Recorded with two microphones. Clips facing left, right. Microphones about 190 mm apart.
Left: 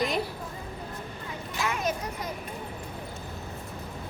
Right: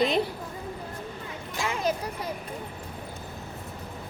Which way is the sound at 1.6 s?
30° right (ahead or behind).